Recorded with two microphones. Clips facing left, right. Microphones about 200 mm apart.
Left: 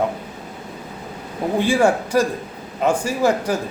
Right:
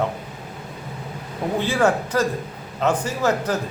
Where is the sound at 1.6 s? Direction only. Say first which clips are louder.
Left 3 dB; 10° left (ahead or behind).